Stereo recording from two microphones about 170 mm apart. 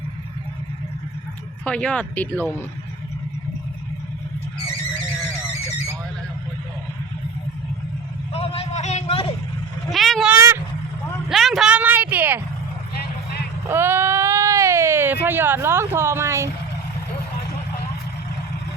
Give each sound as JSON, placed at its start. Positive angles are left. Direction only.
{"t": 1.6, "sound": "speech", "side_deg": 5}
{"t": 8.3, "sound": "a sound", "side_deg": 35}
{"t": 9.9, "sound": "speech", "side_deg": 0}
{"t": 10.3, "sound": "speech", "side_deg": -15}
{"t": 11.3, "sound": "a woman's voice", "side_deg": 0}
{"t": 13.7, "sound": "speech", "side_deg": -15}